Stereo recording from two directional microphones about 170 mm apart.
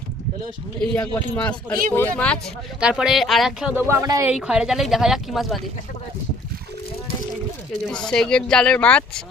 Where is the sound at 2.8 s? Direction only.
5° right (ahead or behind).